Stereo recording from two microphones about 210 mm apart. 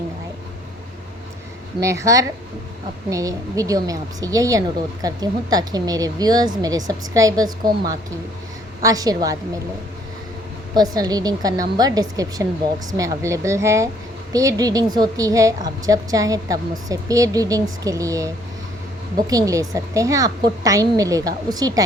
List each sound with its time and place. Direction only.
1.8 s a woman's voice: 15° right (ahead or behind)
8.8 s a woman's voice: 15° right (ahead or behind)
10.8 s a woman's voice: 20° right (ahead or behind)